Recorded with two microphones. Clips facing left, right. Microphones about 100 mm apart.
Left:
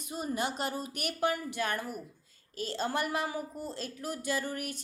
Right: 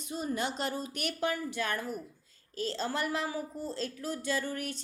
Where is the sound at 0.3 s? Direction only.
5° left (ahead or behind).